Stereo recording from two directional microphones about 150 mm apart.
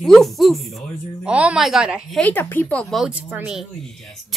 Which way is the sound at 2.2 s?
10° left (ahead or behind).